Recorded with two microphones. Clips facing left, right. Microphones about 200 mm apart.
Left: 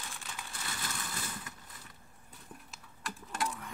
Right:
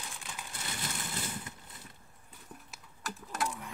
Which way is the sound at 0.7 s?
20° right (ahead or behind).